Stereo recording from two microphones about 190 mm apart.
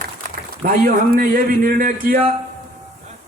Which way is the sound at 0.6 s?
45° right (ahead or behind).